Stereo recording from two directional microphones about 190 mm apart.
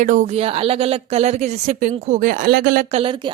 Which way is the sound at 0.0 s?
40° right (ahead or behind).